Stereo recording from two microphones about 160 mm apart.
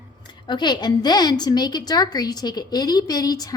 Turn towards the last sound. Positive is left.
turn(degrees=25)  # may be behind; listen again after turning